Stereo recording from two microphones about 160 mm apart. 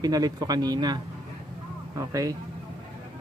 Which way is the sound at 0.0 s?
25° right (ahead or behind).